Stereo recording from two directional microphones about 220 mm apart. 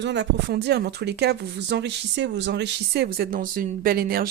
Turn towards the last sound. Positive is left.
turn(degrees=-40)  # may be behind; listen again after turning